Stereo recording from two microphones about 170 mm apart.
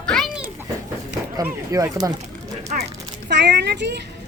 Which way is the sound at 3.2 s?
90° right.